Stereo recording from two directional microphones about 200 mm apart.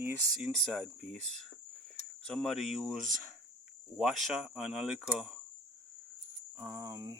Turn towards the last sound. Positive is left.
turn(degrees=-15)  # may be behind; listen again after turning